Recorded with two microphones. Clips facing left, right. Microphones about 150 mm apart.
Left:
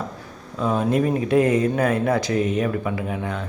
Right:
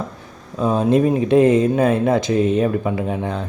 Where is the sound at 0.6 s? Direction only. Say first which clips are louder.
Right 4 dB; 25° right (ahead or behind).